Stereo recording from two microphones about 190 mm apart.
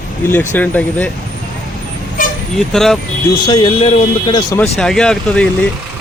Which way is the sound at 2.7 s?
Centre (ahead or behind).